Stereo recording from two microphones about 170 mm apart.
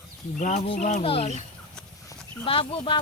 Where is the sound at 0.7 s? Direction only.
45° left (ahead or behind).